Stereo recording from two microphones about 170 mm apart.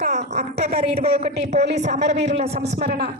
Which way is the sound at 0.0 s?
45° right (ahead or behind).